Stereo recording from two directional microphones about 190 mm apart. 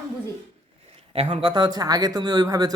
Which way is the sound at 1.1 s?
30° right (ahead or behind).